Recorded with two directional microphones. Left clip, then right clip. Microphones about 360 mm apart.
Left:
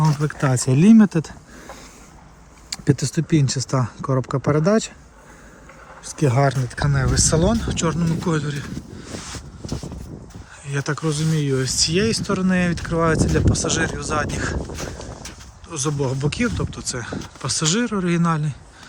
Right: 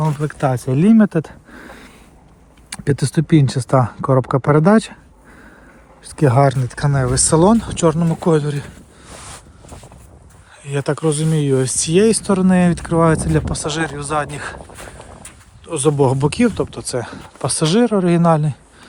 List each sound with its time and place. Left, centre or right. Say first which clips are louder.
0.0 s speech: right 3 dB; centre
2.6 s speech: right 2 dB; centre
6.1 s speech: right 5 dB; centre
10.7 s speech: right 6 dB; centre
15.7 s speech: right 9 dB; centre